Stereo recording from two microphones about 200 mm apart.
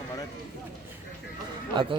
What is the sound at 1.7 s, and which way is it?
Speech, 25° right (ahead or behind).